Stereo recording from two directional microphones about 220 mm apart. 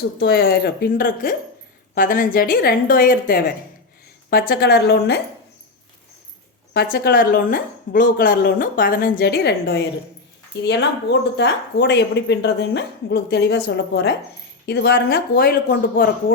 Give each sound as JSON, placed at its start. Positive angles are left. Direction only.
{"t": 0.2, "sound": "speech", "side_deg": 45}
{"t": 6.7, "sound": "speech", "side_deg": 45}